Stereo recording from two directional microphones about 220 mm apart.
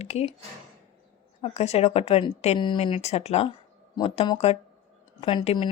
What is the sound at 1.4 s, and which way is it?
A woman's voice, 30° left (ahead or behind).